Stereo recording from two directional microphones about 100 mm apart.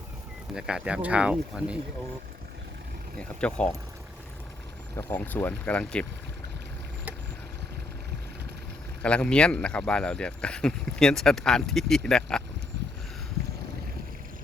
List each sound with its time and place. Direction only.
0.5 s speech: 10° right (ahead or behind)
3.2 s speech: 10° left (ahead or behind)
4.9 s speech: 20° left (ahead or behind)
9.0 s speech: 10° left (ahead or behind)